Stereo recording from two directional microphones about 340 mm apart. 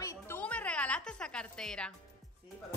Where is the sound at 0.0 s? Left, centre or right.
Centre.